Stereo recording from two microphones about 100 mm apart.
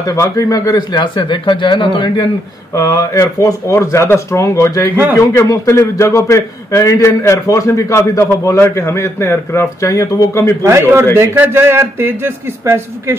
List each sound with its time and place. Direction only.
0.0 s a man's voice: 30° left (ahead or behind); by 2.2 s 50° left (ahead or behind)
2.7 s a man's voice: 40° left (ahead or behind)
10.6 s a man's voice: 30° right (ahead or behind)